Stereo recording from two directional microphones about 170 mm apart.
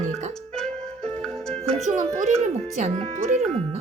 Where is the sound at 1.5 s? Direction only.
40° right (ahead or behind).